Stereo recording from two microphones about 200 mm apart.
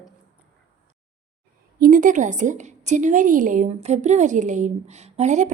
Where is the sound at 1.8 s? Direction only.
45° right (ahead or behind).